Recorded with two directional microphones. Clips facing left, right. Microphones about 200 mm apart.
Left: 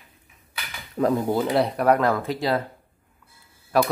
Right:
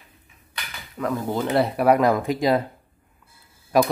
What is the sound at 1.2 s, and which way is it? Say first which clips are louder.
Speech: left 2 dB; 10° left (ahead or behind).